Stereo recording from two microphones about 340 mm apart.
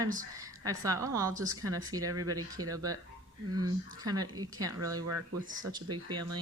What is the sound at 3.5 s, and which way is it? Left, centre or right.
Speech, right.